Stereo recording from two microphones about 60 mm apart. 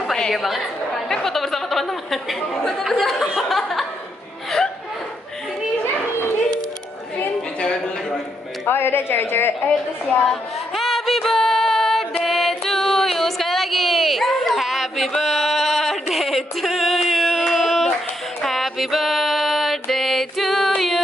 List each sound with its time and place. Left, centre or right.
0.0 s a woman's voice: centre
7.6 s a sound: centre
8.6 s a woman's voice: left
10.7 s music: centre
12.3 s a sound: centre
18.4 s music: centre